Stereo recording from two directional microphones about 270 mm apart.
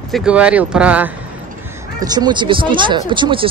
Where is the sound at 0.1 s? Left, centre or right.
Centre.